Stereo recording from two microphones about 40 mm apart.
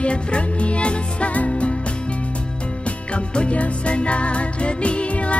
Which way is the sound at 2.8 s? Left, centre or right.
Left.